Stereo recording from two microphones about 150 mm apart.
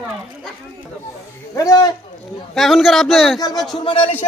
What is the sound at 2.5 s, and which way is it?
Speech, centre (ahead or behind).